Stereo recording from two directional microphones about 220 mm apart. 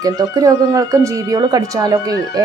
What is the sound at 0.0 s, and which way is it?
Speech, 15° right (ahead or behind).